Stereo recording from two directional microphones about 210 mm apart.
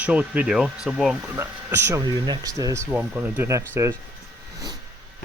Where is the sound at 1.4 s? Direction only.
10° right (ahead or behind).